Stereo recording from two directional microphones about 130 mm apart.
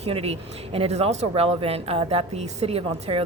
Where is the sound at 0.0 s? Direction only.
50° right (ahead or behind).